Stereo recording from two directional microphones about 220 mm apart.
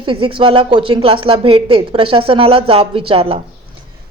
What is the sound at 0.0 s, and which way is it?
Speech, 25° right (ahead or behind).